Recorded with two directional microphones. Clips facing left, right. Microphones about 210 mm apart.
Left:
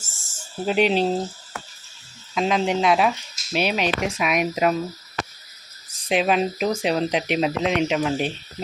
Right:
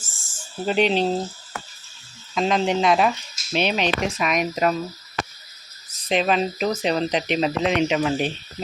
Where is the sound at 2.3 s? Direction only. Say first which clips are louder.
Right 1 dB; 5° left (ahead or behind).